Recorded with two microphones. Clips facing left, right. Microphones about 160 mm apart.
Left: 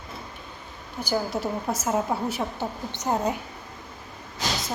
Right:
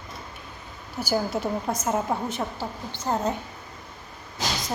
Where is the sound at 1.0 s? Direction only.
5° right (ahead or behind).